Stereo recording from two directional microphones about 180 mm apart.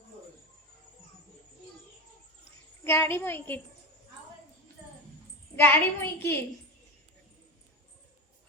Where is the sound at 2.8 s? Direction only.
15° left (ahead or behind).